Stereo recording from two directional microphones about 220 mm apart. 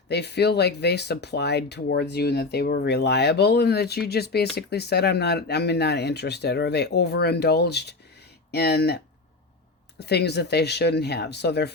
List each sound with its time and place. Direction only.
0.1 s speech: 50° left (ahead or behind)
10.0 s speech: 50° left (ahead or behind)